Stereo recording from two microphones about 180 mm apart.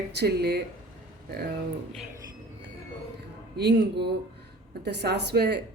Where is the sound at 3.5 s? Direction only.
65° right (ahead or behind).